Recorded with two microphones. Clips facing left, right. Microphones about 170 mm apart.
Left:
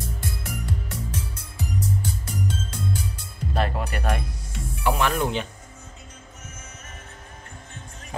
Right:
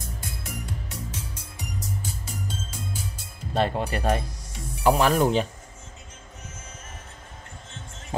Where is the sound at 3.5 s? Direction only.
25° right (ahead or behind).